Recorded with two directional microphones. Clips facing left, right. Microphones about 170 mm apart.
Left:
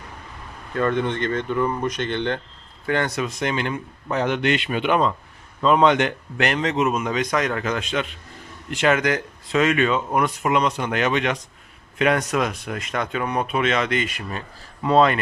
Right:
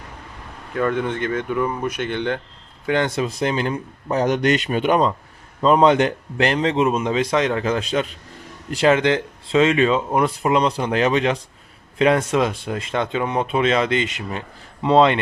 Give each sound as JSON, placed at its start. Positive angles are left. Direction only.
{"t": 0.7, "sound": "speech", "side_deg": -5}